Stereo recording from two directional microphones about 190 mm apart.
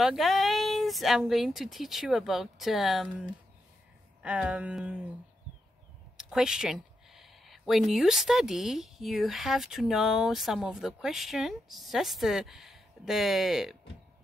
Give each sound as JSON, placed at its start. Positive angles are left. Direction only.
{"t": 0.0, "sound": "speech", "side_deg": 0}
{"t": 6.1, "sound": "speech", "side_deg": -5}